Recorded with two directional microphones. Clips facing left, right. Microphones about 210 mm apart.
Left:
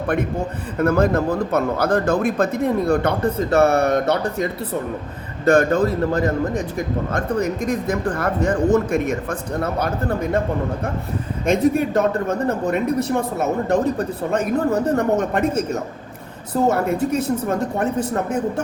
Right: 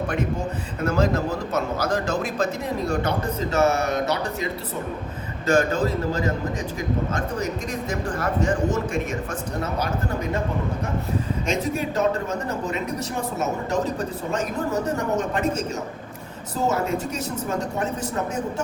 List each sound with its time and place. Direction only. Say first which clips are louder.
0.8 s a woman's voice: left 5 dB; 55° left (ahead or behind)
5.5 s a woman's voice: left 5 dB; 60° left (ahead or behind)
11.4 s a woman's voice: left 12 dB; 55° left (ahead or behind)